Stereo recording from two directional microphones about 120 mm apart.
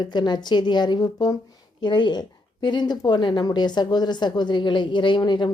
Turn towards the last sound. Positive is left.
turn(degrees=40)  # may be behind; listen again after turning